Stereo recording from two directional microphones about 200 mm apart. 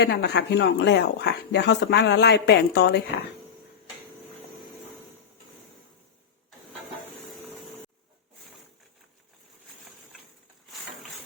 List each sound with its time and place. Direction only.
0.0 s speech: 55° left (ahead or behind)